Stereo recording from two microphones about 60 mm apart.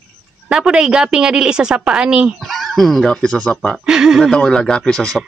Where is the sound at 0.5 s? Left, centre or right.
Centre.